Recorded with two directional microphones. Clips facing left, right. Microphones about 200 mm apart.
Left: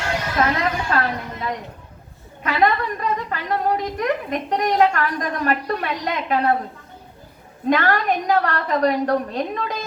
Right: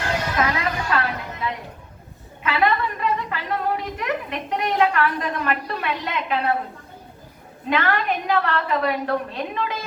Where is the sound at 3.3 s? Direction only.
40° left (ahead or behind).